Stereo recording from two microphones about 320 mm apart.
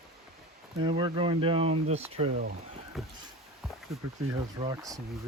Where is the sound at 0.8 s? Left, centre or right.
Centre.